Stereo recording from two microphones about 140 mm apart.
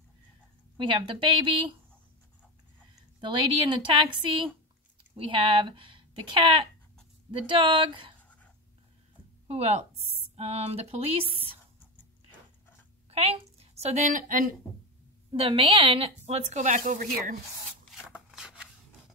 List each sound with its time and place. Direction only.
0.7 s speech: 35° right (ahead or behind)
3.2 s speech: 35° right (ahead or behind)
5.1 s speech: 40° right (ahead or behind)
9.5 s a woman's voice: 50° right (ahead or behind)
13.1 s a woman's voice: 45° right (ahead or behind); by 14.5 s 65° right (ahead or behind)
15.3 s a woman's voice: 40° right (ahead or behind); by 17.4 s 75° right (ahead or behind)
17.9 s rub: 5° right (ahead or behind)